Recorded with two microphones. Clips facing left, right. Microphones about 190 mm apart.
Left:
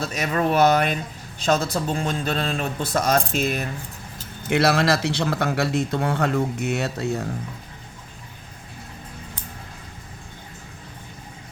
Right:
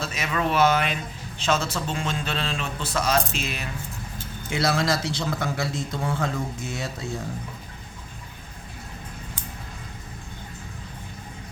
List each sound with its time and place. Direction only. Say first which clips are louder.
0.0 s speech: left 4 dB; 40° left (ahead or behind)
4.4 s speech: left 5 dB; 65° left (ahead or behind)